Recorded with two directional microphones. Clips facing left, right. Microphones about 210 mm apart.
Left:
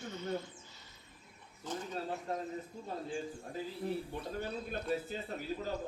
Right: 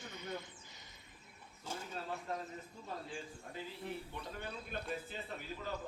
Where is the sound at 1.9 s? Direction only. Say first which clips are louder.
Left 3 dB; 35° left (ahead or behind).